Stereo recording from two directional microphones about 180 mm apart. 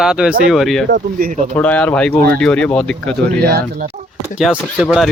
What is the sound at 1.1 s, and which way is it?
Speech, 45° right (ahead or behind).